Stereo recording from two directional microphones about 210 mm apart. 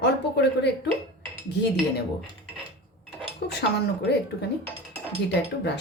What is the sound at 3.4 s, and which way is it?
Speech, 55° left (ahead or behind).